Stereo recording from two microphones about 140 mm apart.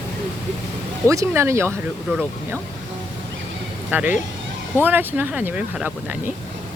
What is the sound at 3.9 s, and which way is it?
Speech, 10° right (ahead or behind).